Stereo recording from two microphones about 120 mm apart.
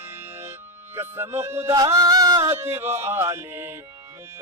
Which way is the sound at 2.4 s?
20° right (ahead or behind).